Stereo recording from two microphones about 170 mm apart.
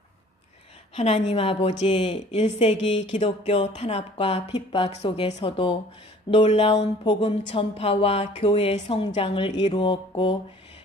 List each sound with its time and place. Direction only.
0.9 s speech: 40° left (ahead or behind)
9.8 s mantra: 30° left (ahead or behind)